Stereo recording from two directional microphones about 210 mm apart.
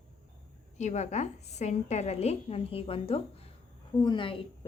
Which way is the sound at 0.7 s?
35° left (ahead or behind).